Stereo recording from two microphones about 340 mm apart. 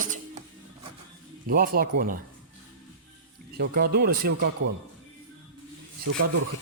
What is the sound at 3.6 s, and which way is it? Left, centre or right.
Speech, right.